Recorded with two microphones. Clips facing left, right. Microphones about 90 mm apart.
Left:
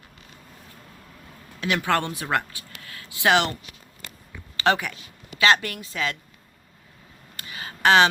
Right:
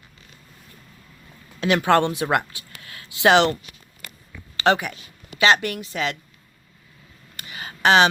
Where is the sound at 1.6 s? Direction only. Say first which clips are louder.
Right 6 dB; 30° right (ahead or behind).